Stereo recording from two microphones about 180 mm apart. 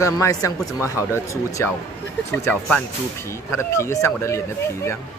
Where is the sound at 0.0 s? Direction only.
20° left (ahead or behind).